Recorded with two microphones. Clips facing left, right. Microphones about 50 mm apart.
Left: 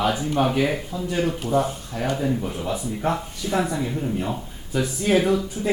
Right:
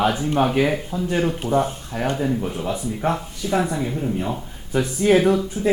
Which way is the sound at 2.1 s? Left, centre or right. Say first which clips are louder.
Right 2 dB; centre.